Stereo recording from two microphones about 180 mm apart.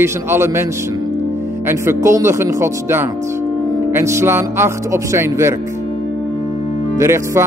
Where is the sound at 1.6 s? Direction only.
15° right (ahead or behind).